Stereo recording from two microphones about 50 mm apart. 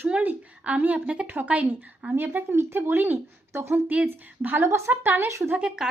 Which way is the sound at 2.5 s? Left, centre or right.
Right.